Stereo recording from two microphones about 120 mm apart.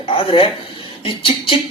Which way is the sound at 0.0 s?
50° left (ahead or behind).